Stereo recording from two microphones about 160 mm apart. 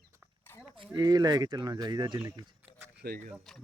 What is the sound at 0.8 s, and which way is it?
Speech, 25° right (ahead or behind).